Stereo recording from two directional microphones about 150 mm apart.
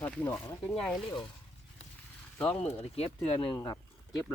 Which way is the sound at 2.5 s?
40° left (ahead or behind).